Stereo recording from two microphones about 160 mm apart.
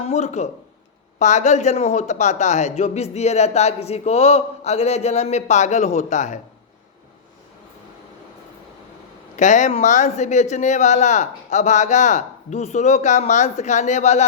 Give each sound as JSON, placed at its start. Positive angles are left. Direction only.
{"t": 0.1, "sound": "speech", "side_deg": 45}
{"t": 9.3, "sound": "speech", "side_deg": 50}